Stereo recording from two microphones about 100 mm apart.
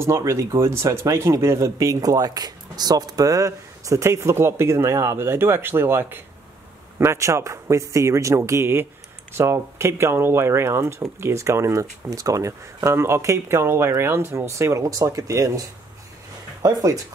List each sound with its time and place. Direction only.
0.0 s speech: 30° right (ahead or behind)
16.6 s speech: 35° right (ahead or behind)